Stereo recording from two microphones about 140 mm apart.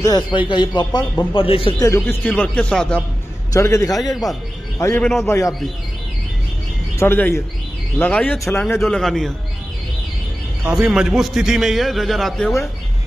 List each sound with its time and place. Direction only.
0.0 s speech: 30° left (ahead or behind)
1.8 s speech: 20° left (ahead or behind)
3.5 s a man's voice: 20° left (ahead or behind)
7.0 s speech: 15° left (ahead or behind)
8.7 s a man's voice: centre (ahead or behind)
10.6 s a man's voice: 5° right (ahead or behind)